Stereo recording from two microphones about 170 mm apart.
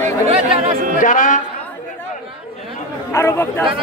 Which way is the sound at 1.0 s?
50° left (ahead or behind).